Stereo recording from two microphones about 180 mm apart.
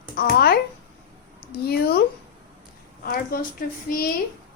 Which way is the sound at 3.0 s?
55° left (ahead or behind).